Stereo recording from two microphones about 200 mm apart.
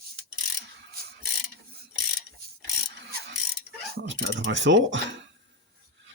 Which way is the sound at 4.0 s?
55° right (ahead or behind).